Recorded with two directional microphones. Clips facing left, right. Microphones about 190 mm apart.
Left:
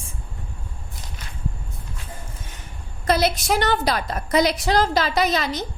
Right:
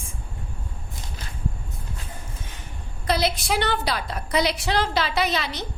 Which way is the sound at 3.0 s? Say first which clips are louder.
Left 3 dB; 45° left (ahead or behind).